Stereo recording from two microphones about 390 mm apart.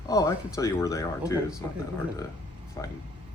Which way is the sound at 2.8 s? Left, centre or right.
Centre.